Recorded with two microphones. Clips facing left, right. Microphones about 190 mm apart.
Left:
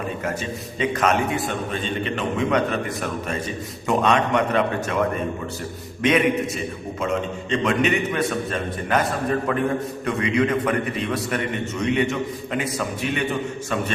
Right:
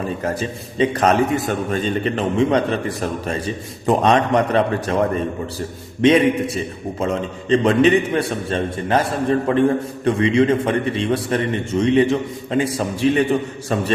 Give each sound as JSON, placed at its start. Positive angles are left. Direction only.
{"t": 0.3, "sound": "a man's voice", "side_deg": -35}
{"t": 7.5, "sound": "a man's voice", "side_deg": -30}